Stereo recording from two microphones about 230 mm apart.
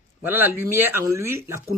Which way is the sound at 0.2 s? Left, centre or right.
Centre.